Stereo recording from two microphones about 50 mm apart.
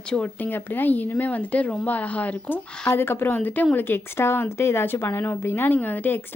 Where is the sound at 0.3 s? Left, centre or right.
Left.